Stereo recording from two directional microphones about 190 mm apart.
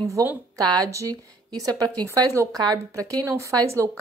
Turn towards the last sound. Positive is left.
turn(degrees=-15)  # may be behind; listen again after turning